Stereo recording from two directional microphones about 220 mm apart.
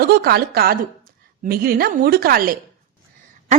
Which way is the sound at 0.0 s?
45° right (ahead or behind).